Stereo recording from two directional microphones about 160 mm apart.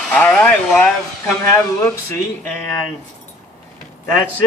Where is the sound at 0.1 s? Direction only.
5° left (ahead or behind).